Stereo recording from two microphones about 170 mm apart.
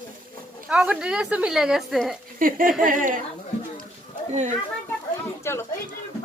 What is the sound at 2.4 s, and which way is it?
Speech, 55° right (ahead or behind).